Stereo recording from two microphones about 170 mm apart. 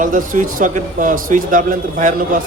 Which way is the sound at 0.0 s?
50° right (ahead or behind).